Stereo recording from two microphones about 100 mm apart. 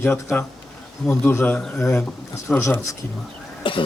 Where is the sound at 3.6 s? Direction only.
60° left (ahead or behind).